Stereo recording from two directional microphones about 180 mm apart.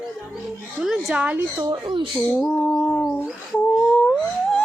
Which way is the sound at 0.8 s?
Centre (ahead or behind).